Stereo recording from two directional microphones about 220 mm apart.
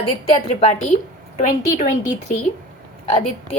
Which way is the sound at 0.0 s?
25° left (ahead or behind).